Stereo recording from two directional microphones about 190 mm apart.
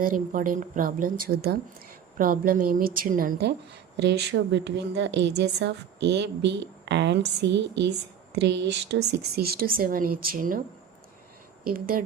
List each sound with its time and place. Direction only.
0.0 s speech: 45° right (ahead or behind)
4.0 s a woman's voice: 60° right (ahead or behind)
11.7 s speech: 50° right (ahead or behind)